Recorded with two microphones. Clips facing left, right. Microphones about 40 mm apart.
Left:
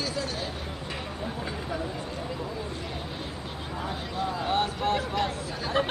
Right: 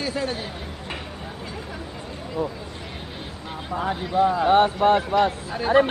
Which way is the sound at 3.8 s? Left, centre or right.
Right.